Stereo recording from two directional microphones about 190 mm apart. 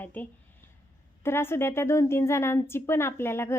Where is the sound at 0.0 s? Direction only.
10° left (ahead or behind).